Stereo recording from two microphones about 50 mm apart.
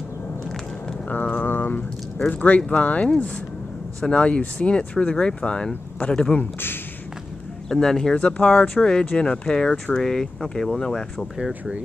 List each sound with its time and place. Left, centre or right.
1.0 s speech: left
1.4 s speech: left
2.1 s speech: left
4.1 s speech: left
7.7 s speech: centre
8.2 s speech: left
11.3 s speech: centre